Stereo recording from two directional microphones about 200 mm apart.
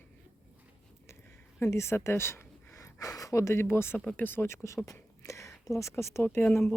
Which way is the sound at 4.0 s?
5° left (ahead or behind).